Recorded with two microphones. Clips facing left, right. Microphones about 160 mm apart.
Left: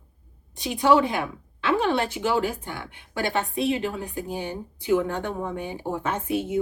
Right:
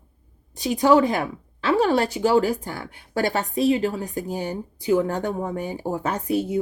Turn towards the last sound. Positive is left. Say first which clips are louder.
# right 2 dB
turn(degrees=-40)  # may be behind; listen again after turning